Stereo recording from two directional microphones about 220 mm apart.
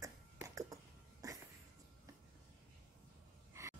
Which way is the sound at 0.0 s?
15° right (ahead or behind).